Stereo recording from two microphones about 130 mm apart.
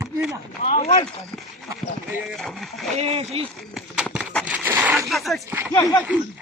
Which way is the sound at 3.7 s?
5° right (ahead or behind).